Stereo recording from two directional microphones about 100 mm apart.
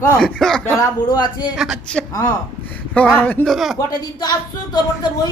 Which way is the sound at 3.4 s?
Centre (ahead or behind).